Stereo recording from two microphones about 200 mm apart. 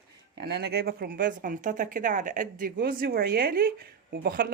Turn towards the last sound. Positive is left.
turn(degrees=-45)  # may be behind; listen again after turning